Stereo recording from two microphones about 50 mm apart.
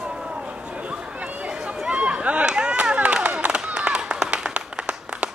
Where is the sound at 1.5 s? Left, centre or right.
Centre.